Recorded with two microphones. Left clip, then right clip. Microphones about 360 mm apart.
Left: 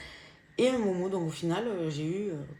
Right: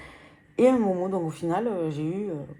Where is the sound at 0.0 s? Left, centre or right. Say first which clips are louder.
Right 1 dB; centre.